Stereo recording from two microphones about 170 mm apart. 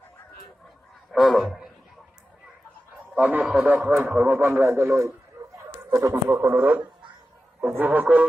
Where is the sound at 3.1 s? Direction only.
10° right (ahead or behind).